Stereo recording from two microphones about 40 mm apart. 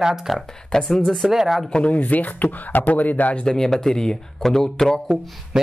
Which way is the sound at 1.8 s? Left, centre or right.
Left.